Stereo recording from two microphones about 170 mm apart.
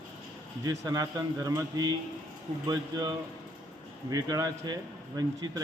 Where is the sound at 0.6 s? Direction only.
20° right (ahead or behind).